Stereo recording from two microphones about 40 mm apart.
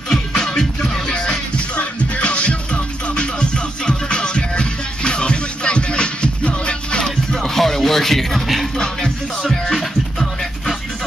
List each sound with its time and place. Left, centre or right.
0.1 s music: centre
1.8 s music: left
7.3 s music: centre
8.7 s music: centre
9.4 s music: centre